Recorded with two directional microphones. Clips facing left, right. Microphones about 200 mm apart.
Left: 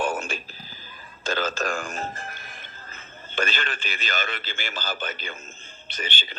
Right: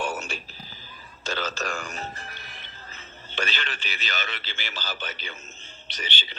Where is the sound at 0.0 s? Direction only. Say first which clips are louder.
Left 4 dB; 50° left (ahead or behind).